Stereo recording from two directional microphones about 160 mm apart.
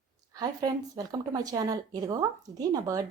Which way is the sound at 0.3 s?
25° right (ahead or behind).